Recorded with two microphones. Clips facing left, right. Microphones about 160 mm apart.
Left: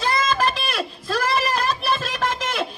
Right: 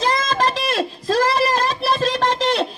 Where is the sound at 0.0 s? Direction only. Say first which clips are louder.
Right 2 dB; 35° right (ahead or behind).